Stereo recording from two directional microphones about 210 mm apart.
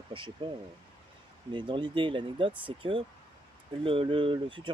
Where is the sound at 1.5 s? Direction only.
20° right (ahead or behind).